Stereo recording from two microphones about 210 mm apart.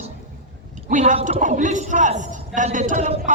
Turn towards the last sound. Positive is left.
turn(degrees=-35)  # may be behind; listen again after turning